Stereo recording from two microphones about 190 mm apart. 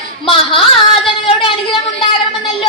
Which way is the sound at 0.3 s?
25° left (ahead or behind).